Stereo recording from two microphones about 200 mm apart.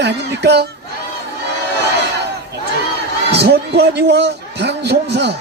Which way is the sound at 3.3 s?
55° right (ahead or behind).